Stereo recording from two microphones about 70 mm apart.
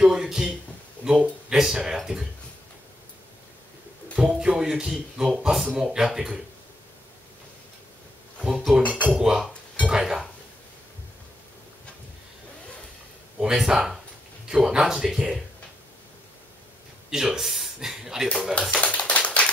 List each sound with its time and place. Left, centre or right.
0.0 s speech: centre
4.4 s speech: centre
8.5 s speech: centre
8.8 s music: centre
9.1 s speech: centre
9.8 s a sound: centre
13.4 s speech: centre
17.1 s speech: centre
18.5 s typewriter: centre